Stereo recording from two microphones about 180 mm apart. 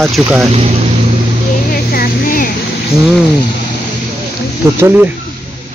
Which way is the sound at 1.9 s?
55° left (ahead or behind).